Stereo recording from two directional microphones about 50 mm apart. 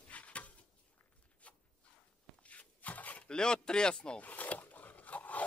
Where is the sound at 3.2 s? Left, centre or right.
Centre.